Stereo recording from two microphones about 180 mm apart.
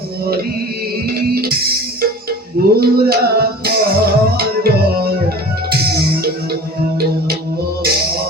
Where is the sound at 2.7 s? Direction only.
60° right (ahead or behind).